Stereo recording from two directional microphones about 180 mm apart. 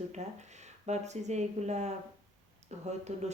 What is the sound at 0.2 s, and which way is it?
Speech, 40° right (ahead or behind).